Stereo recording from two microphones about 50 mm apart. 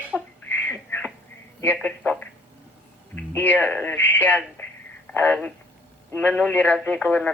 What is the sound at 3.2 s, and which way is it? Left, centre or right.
Speech, left.